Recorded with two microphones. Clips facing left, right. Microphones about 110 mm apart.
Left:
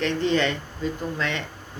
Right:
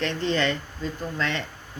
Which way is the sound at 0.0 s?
15° left (ahead or behind).